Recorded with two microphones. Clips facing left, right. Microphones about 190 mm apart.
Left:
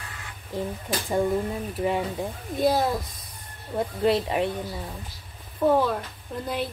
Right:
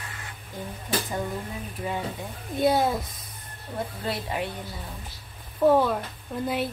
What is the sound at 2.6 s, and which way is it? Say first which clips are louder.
Speech: even; centre (ahead or behind).